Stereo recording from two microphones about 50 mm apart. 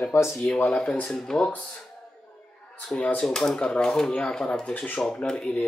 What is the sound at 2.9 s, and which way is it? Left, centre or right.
Speech, left.